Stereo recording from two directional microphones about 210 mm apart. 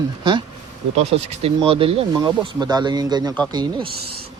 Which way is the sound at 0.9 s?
30° right (ahead or behind).